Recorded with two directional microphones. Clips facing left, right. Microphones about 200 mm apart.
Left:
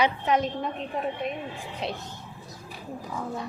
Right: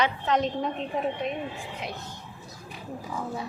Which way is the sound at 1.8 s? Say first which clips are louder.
Left 5 dB; 30° left (ahead or behind).